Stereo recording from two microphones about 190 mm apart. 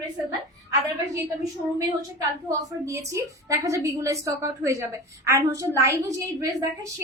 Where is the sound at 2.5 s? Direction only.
15° right (ahead or behind).